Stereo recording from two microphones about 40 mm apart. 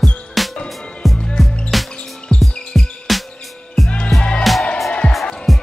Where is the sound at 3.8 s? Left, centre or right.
Left.